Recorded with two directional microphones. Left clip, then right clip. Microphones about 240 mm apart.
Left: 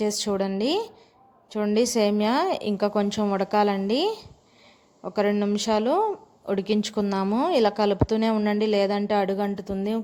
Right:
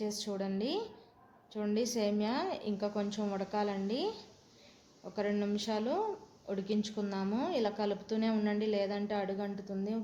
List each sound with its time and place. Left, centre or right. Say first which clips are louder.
0.0 s a woman's voice: left 12 dB; left